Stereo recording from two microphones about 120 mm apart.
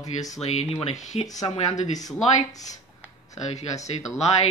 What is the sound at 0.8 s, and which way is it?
Speech, 80° left.